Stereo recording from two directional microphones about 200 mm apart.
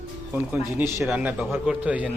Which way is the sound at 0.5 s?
10° right (ahead or behind).